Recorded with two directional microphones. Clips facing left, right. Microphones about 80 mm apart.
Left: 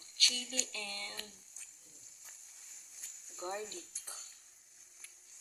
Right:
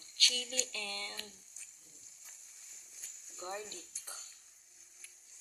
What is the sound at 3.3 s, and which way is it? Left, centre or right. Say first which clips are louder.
Speech: left 2 dB; centre.